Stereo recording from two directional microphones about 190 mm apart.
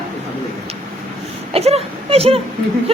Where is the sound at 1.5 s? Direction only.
30° right (ahead or behind).